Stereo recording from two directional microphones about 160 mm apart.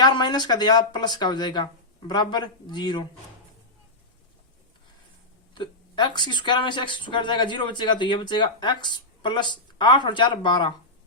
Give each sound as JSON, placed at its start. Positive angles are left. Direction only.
{"t": 0.0, "sound": "speech", "side_deg": 30}
{"t": 5.5, "sound": "speech", "side_deg": 30}